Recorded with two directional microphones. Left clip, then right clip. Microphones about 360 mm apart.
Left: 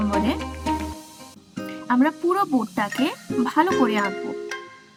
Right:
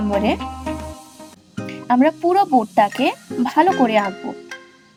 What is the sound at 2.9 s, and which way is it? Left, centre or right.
Speech, centre.